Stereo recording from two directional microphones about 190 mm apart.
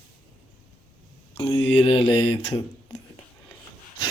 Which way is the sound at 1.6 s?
30° left (ahead or behind).